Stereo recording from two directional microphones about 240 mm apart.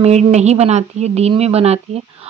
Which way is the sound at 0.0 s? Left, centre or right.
Right.